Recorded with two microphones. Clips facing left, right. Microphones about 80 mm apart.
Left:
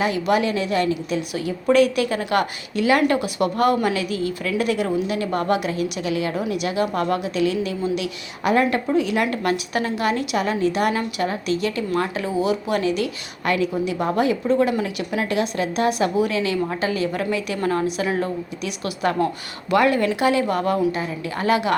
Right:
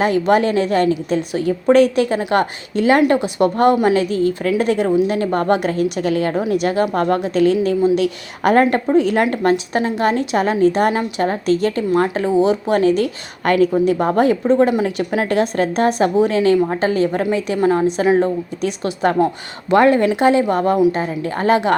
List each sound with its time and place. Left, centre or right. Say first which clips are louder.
0.0 s a woman's voice: right 5 dB; right
14.5 s a woman's voice: right 5 dB; right